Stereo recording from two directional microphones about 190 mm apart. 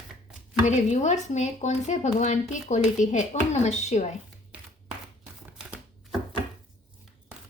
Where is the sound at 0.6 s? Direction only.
40° left (ahead or behind).